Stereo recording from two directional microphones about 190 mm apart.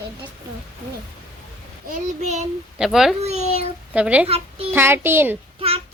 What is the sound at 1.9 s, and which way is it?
Child singing, 35° right (ahead or behind).